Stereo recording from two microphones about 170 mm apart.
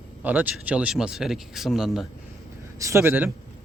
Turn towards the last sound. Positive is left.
turn(degrees=-10)  # may be behind; listen again after turning